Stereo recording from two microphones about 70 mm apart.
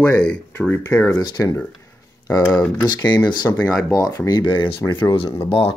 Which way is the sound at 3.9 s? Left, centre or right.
Left.